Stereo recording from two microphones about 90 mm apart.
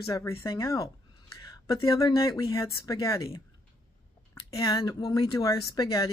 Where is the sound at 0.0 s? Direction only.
35° left (ahead or behind).